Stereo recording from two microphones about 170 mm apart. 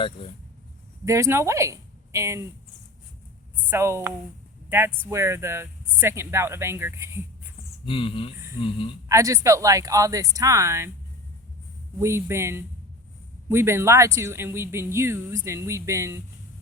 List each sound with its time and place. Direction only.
1.0 s a woman's voice: 15° right (ahead or behind)
3.7 s speech: 15° right (ahead or behind)
7.9 s speech: 30° left (ahead or behind)
9.0 s speech: 20° right (ahead or behind)
11.9 s speech: 15° right (ahead or behind)